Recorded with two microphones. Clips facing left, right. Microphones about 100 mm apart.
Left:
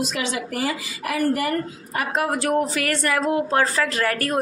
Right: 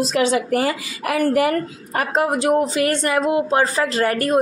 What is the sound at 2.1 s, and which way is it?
Speech, 20° right (ahead or behind).